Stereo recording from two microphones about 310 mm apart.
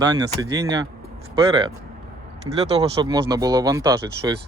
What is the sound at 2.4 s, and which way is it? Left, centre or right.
Speech, centre.